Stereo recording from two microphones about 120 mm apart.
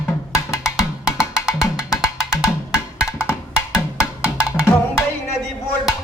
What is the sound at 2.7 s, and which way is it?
Music, 25° left (ahead or behind).